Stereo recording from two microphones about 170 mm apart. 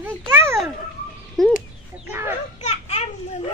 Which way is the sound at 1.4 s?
5° left (ahead or behind).